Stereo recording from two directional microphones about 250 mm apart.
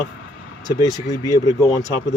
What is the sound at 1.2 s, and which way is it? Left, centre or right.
Speech, centre.